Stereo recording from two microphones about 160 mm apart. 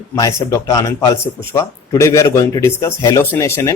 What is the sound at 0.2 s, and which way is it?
Speech, 20° left (ahead or behind).